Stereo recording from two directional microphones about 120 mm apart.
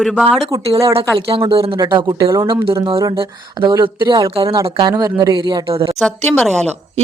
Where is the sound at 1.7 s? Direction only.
35° right (ahead or behind).